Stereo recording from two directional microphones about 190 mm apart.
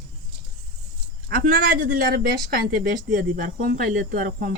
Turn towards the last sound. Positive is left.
turn(degrees=-50)  # may be behind; listen again after turning